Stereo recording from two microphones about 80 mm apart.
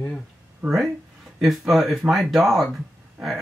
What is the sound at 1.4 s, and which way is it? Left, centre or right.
Speech, centre.